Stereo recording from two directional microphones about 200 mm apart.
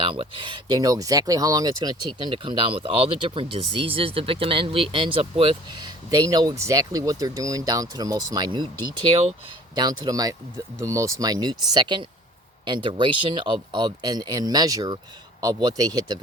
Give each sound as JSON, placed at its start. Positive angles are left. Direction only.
{"t": 0.0, "sound": "speech", "side_deg": -25}